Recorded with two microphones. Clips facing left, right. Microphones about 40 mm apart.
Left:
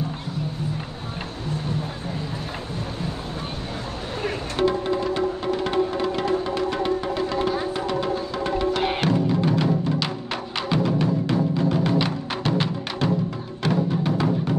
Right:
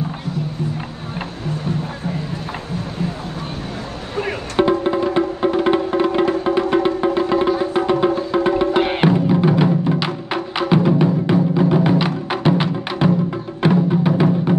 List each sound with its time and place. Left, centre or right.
4.2 s music: right